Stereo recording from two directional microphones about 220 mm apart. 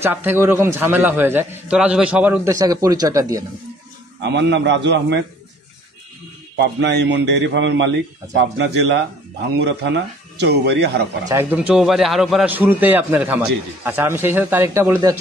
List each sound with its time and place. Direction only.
0.0 s a man's voice: 10° right (ahead or behind)
4.2 s a man's voice: 50° right (ahead or behind)
6.5 s a man's voice: 50° right (ahead or behind)
11.2 s a man's voice: 10° right (ahead or behind)